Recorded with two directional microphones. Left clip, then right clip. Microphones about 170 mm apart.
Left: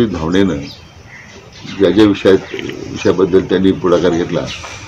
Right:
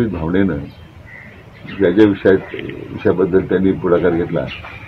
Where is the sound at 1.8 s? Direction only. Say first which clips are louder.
Left 2 dB; 40° left (ahead or behind).